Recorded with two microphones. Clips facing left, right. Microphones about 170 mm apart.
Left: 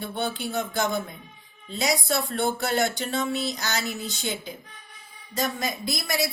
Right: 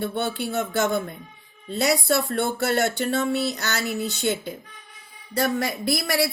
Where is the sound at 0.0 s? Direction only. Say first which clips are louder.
Right 3 dB; 65° right (ahead or behind).